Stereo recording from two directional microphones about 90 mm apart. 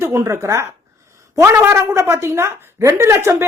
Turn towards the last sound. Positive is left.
turn(degrees=-30)  # may be behind; listen again after turning